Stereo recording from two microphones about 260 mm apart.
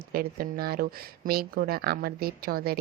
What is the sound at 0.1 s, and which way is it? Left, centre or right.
Speech, right.